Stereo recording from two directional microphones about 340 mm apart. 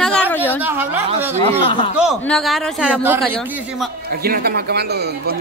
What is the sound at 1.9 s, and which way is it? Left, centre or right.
A man's voice, centre.